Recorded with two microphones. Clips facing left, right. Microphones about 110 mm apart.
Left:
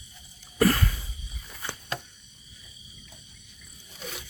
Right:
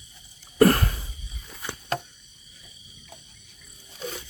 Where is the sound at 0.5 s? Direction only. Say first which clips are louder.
Right 5 dB; 50° right (ahead or behind).